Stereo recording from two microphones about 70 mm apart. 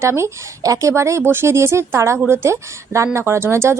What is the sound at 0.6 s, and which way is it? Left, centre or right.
A woman's voice, right.